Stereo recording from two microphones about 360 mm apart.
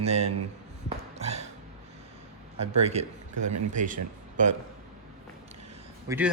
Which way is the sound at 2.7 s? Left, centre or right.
Centre.